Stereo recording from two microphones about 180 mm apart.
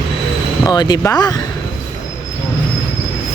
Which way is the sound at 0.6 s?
20° left (ahead or behind).